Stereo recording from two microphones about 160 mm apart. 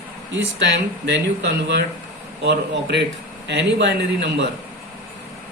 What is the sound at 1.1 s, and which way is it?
Speech, 90° right.